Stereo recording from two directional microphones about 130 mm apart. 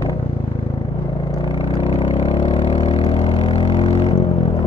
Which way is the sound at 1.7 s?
50° left (ahead or behind).